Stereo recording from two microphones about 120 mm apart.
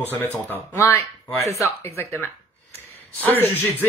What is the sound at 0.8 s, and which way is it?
Speech, 20° left (ahead or behind).